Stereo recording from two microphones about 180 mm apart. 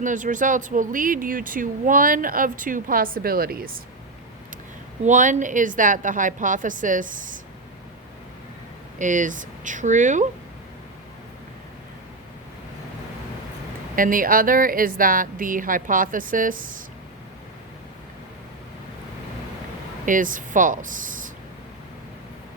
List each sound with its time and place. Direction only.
0.0 s speech: 45° right (ahead or behind)
5.0 s speech: 45° right (ahead or behind)
9.0 s speech: 45° right (ahead or behind)
13.9 s speech: 50° right (ahead or behind)
20.1 s speech: 45° right (ahead or behind)